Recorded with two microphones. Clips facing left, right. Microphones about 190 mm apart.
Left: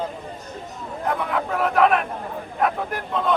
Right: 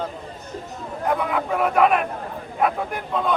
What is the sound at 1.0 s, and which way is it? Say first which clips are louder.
Speech: right 2 dB; centre (ahead or behind).